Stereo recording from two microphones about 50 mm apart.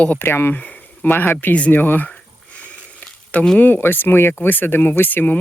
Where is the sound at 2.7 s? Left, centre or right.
Left.